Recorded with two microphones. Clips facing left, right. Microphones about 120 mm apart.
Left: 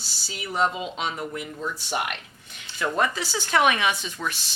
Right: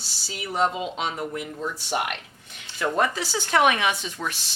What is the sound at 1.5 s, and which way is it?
Speech, 30° right (ahead or behind).